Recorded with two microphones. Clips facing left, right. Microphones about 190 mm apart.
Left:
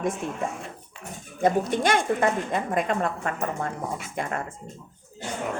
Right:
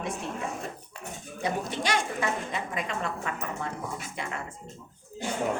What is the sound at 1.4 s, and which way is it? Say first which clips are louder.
A woman's voice: left 8 dB; 50° left (ahead or behind).